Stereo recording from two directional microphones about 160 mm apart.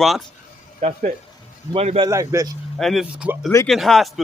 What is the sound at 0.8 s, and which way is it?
A man's voice, 40° right (ahead or behind).